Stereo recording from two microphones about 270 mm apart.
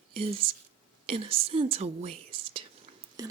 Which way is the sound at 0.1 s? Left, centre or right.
Right.